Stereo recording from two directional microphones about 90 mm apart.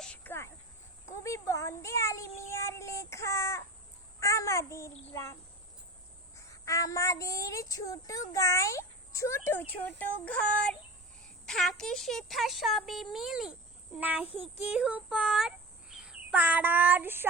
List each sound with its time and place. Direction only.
0.3 s cricket: 30° left (ahead or behind)
1.1 s a woman's voice: 35° left (ahead or behind); by 10.8 s 15° left (ahead or behind)
11.4 s speech: 5° left (ahead or behind)
14.0 s a child's voice: 15° right (ahead or behind)
16.3 s child singing: 15° right (ahead or behind)